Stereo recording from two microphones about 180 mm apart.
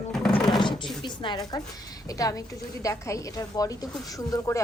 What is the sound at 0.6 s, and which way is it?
A woman's voice, 25° left (ahead or behind).